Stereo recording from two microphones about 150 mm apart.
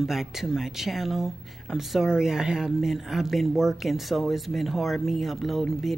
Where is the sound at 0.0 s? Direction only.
Centre (ahead or behind).